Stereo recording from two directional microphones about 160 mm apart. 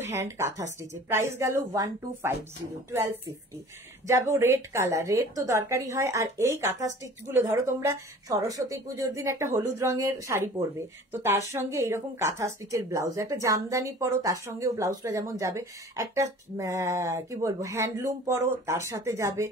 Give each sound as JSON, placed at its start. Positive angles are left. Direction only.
{"t": 0.0, "sound": "a woman's voice", "side_deg": -15}